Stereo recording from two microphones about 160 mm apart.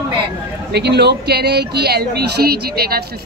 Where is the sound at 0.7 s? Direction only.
90° right.